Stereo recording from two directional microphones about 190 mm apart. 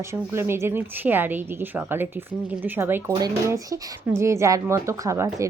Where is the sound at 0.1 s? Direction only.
15° right (ahead or behind).